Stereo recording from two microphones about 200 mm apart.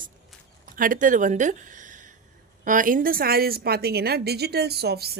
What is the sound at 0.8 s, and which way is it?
A woman's voice, 40° right (ahead or behind).